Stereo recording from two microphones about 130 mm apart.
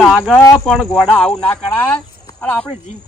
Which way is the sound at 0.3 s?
20° left (ahead or behind).